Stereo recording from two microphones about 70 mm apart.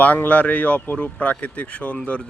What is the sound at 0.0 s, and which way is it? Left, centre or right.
Speech, left.